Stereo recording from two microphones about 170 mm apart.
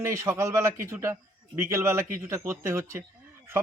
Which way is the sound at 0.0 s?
15° right (ahead or behind).